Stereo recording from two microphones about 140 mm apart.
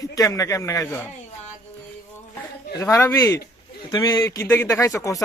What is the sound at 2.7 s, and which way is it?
A man's voice, 20° left (ahead or behind).